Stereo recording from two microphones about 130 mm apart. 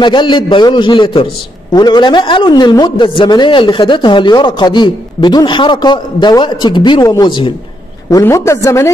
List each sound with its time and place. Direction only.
0.0 s a man's voice: 35° left (ahead or behind)
8.1 s a woman's voice: 20° left (ahead or behind)